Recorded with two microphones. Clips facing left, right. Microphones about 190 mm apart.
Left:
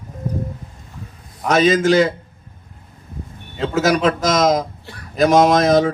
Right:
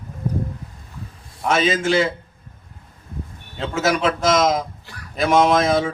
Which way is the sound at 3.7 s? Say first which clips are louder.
Left 3 dB; 40° left (ahead or behind).